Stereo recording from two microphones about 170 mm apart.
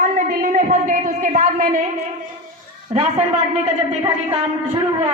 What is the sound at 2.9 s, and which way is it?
Speech, 40° right (ahead or behind).